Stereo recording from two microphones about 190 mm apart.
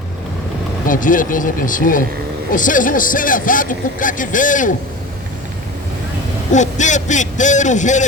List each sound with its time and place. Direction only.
0.9 s speech: 45° left (ahead or behind)
6.5 s a man's voice: 40° left (ahead or behind)